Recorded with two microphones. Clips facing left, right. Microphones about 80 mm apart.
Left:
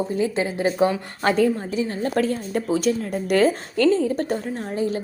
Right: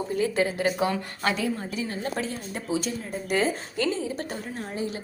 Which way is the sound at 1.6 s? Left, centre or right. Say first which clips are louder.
Left 6 dB; left.